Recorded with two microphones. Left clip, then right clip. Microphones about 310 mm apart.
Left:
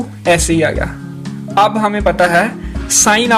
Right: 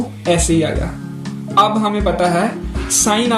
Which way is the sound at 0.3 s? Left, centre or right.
Left.